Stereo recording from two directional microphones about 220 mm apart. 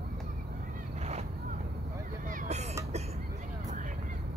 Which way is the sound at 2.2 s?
30° right (ahead or behind).